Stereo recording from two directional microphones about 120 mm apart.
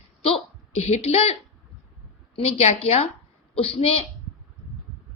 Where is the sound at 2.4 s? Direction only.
55° left (ahead or behind).